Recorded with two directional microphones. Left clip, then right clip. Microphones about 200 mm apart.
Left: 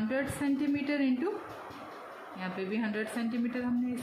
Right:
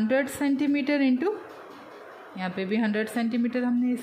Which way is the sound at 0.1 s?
40° right (ahead or behind).